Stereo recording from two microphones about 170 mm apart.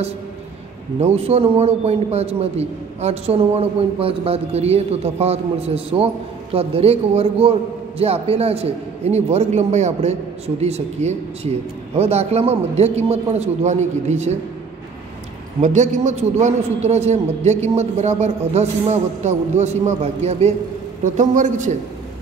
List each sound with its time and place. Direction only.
1.0 s a man's voice: 35° right (ahead or behind)
15.6 s a man's voice: 45° right (ahead or behind)